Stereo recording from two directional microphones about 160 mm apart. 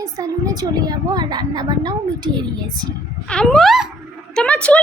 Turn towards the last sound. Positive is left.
turn(degrees=5)  # may be behind; listen again after turning